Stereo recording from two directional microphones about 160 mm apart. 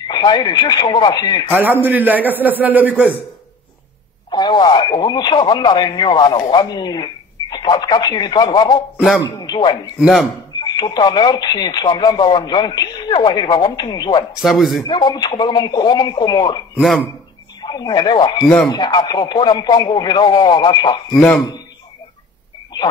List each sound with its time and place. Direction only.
0.1 s speech: 25° left (ahead or behind)
1.8 s a man's voice: 10° right (ahead or behind)
4.3 s speech: 25° left (ahead or behind)
9.9 s speech: centre (ahead or behind)
10.6 s speech: 25° left (ahead or behind)
14.4 s speech: centre (ahead or behind)
14.8 s speech: 25° left (ahead or behind)